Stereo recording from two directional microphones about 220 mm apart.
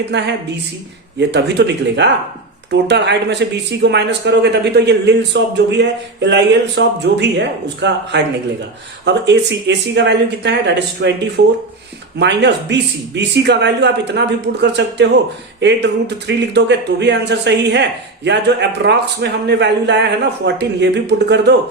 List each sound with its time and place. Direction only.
0.1 s speech: 50° right (ahead or behind)
12.2 s speech: 50° right (ahead or behind)